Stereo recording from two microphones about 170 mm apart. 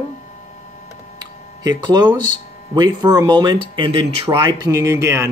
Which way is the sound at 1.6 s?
25° right (ahead or behind).